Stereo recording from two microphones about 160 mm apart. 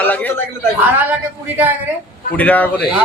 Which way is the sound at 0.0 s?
10° left (ahead or behind).